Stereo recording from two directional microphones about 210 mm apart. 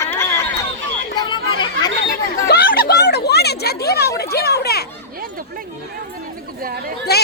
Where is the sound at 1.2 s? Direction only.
20° left (ahead or behind).